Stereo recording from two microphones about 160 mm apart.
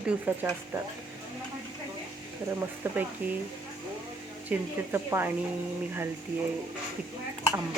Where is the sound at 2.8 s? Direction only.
15° right (ahead or behind).